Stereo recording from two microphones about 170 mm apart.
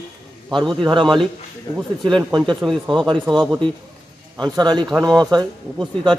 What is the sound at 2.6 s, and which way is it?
A man's voice, centre (ahead or behind).